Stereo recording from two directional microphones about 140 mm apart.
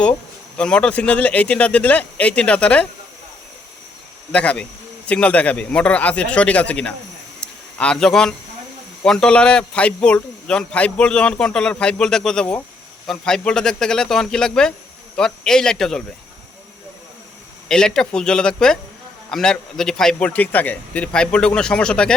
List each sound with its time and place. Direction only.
0.5 s a man's voice: 5° left (ahead or behind)
4.3 s a man's voice: 10° left (ahead or behind)
17.7 s a man's voice: 5° left (ahead or behind)